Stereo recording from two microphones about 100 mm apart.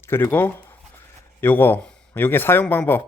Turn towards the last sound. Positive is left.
turn(degrees=20)  # may be behind; listen again after turning